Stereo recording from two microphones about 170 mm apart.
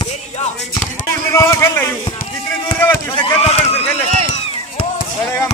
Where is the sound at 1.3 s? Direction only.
15° left (ahead or behind).